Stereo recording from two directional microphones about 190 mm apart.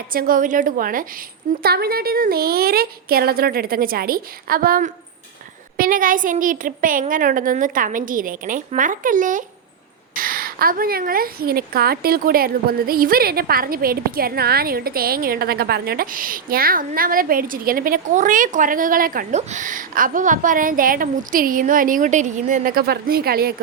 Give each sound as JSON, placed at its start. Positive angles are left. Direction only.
{"t": 0.1, "sound": "a woman's voice", "side_deg": -50}